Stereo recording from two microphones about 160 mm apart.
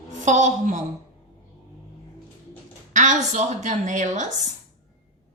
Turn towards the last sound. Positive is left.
turn(degrees=-50)  # may be behind; listen again after turning